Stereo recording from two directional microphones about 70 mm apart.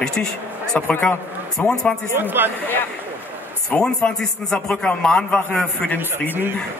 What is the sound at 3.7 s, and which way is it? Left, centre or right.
A man's voice, centre.